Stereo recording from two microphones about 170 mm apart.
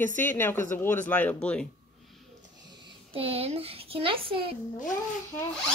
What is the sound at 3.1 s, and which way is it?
Speech, 35° right (ahead or behind).